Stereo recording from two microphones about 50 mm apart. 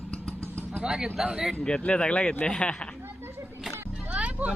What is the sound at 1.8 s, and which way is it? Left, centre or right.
Speech, left.